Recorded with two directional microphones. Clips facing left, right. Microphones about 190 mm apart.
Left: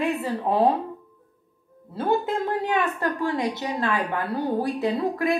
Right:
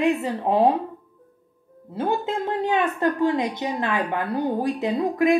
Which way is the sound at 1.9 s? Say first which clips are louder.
Left 1 dB; 20° right (ahead or behind).